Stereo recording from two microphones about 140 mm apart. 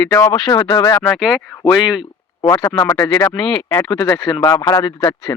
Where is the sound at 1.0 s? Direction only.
Centre (ahead or behind).